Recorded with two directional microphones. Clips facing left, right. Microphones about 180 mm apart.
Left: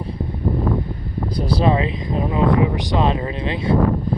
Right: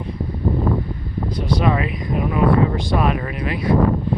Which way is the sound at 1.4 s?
35° left (ahead or behind).